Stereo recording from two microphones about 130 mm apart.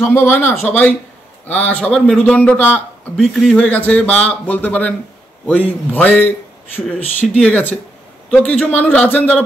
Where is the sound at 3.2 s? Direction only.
Centre (ahead or behind).